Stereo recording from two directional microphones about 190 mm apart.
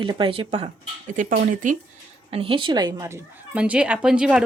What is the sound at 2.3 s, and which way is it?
A woman's voice, 30° right (ahead or behind).